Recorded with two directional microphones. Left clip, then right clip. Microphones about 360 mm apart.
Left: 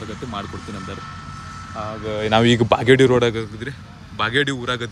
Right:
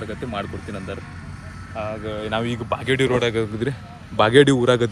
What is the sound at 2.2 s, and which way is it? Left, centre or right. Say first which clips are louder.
Speech: left 11 dB; left.